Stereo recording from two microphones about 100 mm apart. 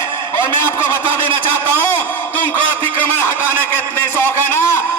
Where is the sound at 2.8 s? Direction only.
20° left (ahead or behind).